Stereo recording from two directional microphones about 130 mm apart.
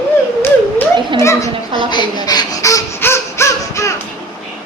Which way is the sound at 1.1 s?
25° left (ahead or behind).